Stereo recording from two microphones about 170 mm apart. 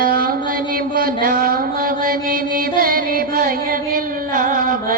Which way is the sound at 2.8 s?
60° right (ahead or behind).